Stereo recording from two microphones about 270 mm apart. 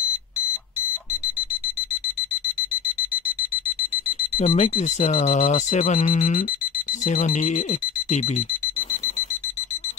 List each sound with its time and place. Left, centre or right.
4.4 s speech: left